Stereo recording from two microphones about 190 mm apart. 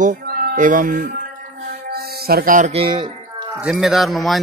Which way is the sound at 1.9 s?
55° right (ahead or behind).